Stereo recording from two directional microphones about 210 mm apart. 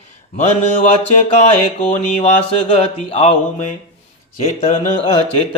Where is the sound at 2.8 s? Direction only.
30° left (ahead or behind).